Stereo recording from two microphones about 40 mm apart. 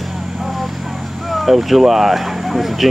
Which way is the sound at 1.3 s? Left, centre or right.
Centre.